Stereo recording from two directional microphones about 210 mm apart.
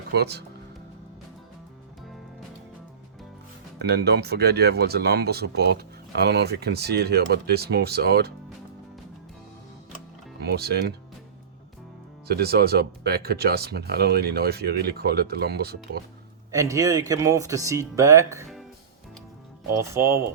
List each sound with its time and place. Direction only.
0.1 s speech: 50° right (ahead or behind)
3.8 s speech: 50° right (ahead or behind)
10.4 s speech: 50° right (ahead or behind)
12.3 s speech: 50° right (ahead or behind)
16.5 s speech: 15° right (ahead or behind)
19.7 s speech: 15° right (ahead or behind)